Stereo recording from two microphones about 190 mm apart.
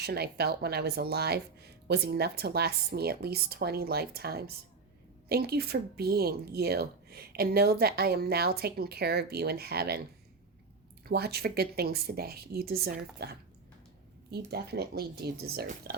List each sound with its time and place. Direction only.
0.0 s speech: 55° right (ahead or behind)
11.1 s speech: 55° right (ahead or behind)